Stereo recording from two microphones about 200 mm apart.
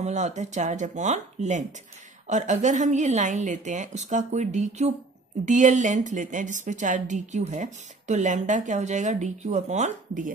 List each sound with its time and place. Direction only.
0.0 s a woman's voice: 35° right (ahead or behind)